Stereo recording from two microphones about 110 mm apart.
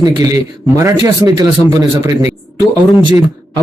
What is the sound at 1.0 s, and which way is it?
Speech, 40° right (ahead or behind).